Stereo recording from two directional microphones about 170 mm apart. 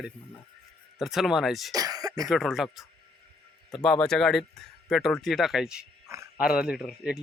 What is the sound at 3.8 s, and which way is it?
Speech, 5° left (ahead or behind).